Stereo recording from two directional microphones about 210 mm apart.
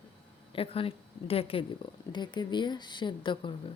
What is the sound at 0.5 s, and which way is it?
Speech, 25° left (ahead or behind).